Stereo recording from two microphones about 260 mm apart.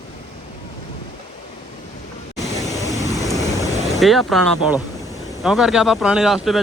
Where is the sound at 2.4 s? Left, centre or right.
Centre.